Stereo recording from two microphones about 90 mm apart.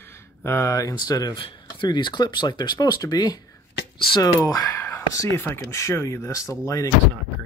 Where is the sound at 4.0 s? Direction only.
65° left (ahead or behind).